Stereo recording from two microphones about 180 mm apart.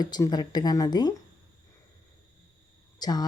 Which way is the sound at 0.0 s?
20° left (ahead or behind).